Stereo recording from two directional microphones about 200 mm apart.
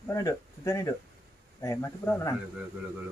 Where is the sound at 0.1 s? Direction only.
15° left (ahead or behind).